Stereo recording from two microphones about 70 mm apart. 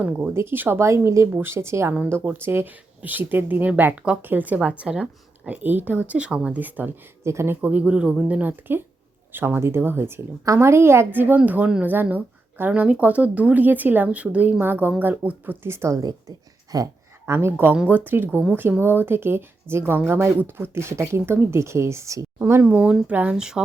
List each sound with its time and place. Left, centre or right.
0.0 s speech: right
6.6 s speech: right
7.3 s speech: right
7.6 s speech: centre
10.4 s speech: right
15.6 s speech: right
16.0 s a woman's voice: right
17.2 s speech: right
22.7 s speech: centre